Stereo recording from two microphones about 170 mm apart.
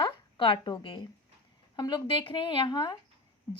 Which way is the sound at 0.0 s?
30° left (ahead or behind).